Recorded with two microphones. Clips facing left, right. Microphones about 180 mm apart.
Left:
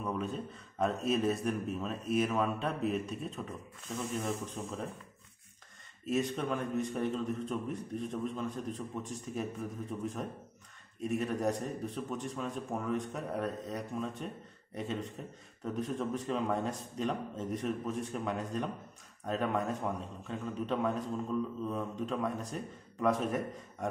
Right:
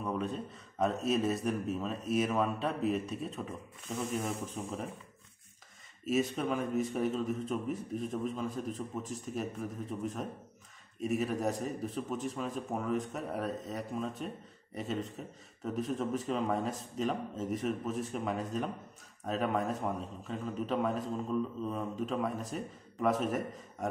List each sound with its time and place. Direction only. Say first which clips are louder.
0.0 s a man's voice: right 1 dB; centre (ahead or behind)
6.0 s a man's voice: right 1 dB; 5° right (ahead or behind)